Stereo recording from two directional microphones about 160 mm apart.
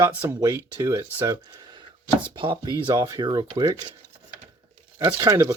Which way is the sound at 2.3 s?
30° right (ahead or behind).